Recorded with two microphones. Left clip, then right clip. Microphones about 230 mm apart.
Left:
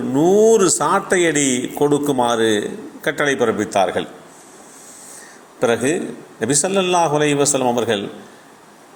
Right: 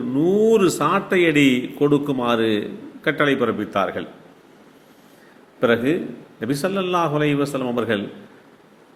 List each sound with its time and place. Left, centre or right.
0.2 s a man's voice: centre
5.5 s a man's voice: centre